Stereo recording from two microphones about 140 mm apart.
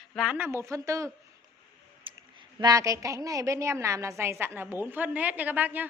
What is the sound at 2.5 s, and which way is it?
A woman's voice, 25° right (ahead or behind).